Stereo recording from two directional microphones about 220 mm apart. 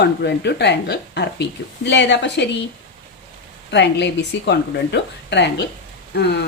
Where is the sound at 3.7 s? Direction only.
50° left (ahead or behind).